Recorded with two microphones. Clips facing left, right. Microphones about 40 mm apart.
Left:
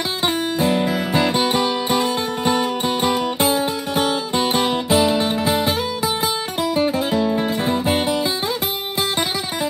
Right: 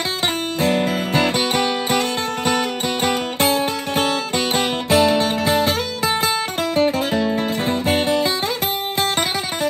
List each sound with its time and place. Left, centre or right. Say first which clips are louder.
0.7 s music: even; right